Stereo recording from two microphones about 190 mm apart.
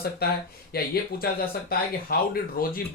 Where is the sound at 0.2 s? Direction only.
55° left (ahead or behind).